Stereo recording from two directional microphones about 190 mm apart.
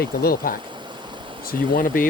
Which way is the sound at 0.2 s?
50° left (ahead or behind).